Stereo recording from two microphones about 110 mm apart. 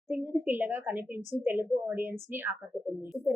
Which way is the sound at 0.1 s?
15° right (ahead or behind).